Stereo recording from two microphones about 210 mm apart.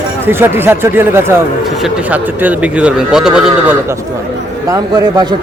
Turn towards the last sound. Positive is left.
turn(degrees=-20)  # may be behind; listen again after turning